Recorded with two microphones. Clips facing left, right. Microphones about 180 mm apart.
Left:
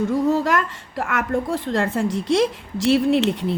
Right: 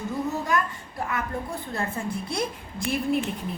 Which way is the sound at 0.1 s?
90° left.